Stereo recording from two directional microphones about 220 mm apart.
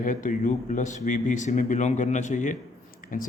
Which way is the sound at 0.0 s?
35° left (ahead or behind).